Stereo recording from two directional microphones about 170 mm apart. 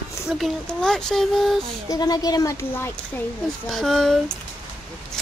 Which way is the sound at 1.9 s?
20° left (ahead or behind).